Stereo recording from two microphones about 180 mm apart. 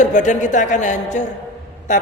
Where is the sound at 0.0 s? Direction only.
45° left (ahead or behind).